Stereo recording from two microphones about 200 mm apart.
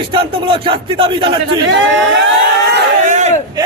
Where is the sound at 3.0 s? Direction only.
35° right (ahead or behind).